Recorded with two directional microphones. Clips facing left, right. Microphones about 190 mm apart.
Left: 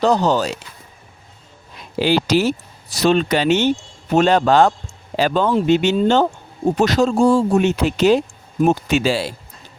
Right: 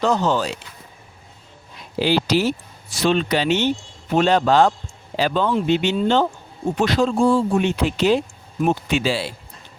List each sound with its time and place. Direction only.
0.0 s speech: 35° left (ahead or behind)
2.0 s speech: 50° left (ahead or behind)